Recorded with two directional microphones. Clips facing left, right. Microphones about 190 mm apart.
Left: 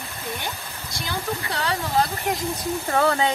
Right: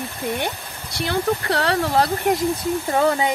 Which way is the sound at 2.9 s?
15° right (ahead or behind).